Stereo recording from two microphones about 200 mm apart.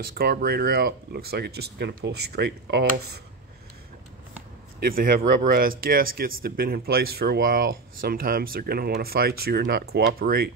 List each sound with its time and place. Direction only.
0.0 s speech: 50° right (ahead or behind)
4.7 s speech: 45° right (ahead or behind)